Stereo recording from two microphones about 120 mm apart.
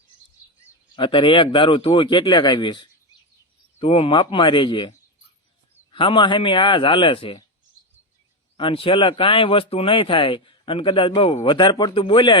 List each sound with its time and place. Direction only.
0.9 s speech: 45° left (ahead or behind)
3.8 s speech: 55° left (ahead or behind)
5.9 s speech: 45° left (ahead or behind)
8.5 s speech: 45° left (ahead or behind)